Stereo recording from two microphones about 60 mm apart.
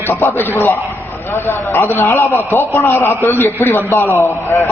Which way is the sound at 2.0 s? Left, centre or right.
Left.